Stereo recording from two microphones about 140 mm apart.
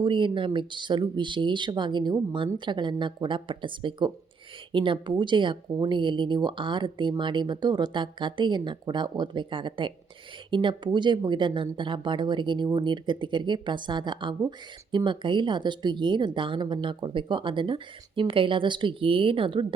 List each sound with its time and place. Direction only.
0.0 s speech: 35° right (ahead or behind)